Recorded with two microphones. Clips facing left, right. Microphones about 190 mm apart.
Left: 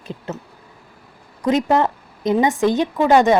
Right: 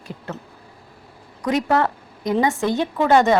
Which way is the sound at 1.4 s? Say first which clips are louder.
Left 3 dB; 20° left (ahead or behind).